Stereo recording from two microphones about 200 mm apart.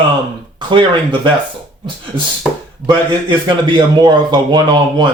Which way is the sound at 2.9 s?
20° right (ahead or behind).